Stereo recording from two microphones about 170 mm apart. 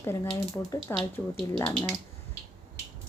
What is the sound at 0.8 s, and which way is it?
Speech, centre (ahead or behind).